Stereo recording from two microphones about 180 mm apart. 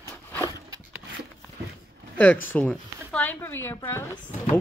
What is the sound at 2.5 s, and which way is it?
Speech, 5° left (ahead or behind).